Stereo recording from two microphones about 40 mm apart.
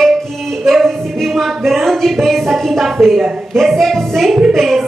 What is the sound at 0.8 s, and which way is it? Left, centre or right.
Music, centre.